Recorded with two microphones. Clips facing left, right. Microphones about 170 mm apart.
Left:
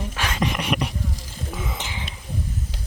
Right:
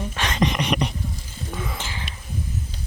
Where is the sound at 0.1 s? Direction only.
5° left (ahead or behind).